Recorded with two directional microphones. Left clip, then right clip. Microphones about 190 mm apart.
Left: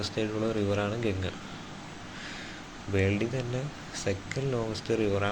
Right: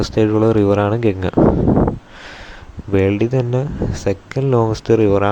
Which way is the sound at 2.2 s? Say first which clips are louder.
Right 5 dB; 50° right (ahead or behind).